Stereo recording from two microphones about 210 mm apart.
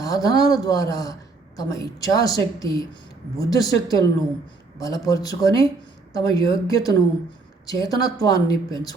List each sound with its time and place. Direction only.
0.0 s a woman's voice: 15° left (ahead or behind)